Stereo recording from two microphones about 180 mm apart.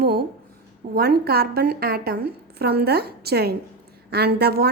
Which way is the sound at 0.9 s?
60° right (ahead or behind).